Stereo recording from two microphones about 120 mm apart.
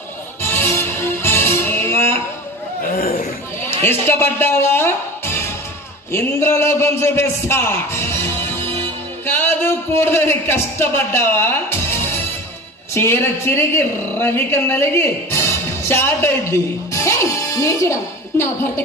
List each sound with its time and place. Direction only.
0.4 s music: 20° left (ahead or behind)
3.7 s music: 20° left (ahead or behind)
6.1 s a man's voice: 20° left (ahead or behind)